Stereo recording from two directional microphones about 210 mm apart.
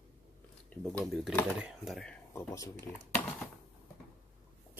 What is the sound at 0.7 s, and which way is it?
Speech, 5° left (ahead or behind).